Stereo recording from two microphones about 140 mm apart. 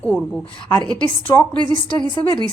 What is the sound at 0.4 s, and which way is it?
Speech, 35° left (ahead or behind).